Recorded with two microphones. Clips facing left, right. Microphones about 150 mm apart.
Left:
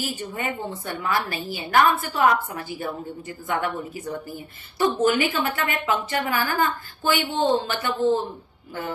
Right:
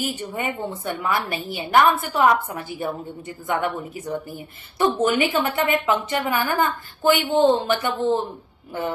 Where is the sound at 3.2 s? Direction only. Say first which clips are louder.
Right 3 dB; 20° right (ahead or behind).